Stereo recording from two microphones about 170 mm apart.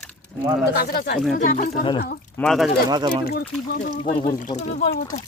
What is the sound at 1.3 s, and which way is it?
Speech, 50° left (ahead or behind).